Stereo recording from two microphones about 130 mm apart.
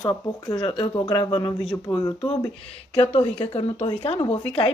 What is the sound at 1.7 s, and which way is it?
Speech, 25° left (ahead or behind).